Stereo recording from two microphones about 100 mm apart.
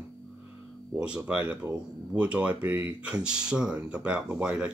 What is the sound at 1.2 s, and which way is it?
Speech, 10° right (ahead or behind).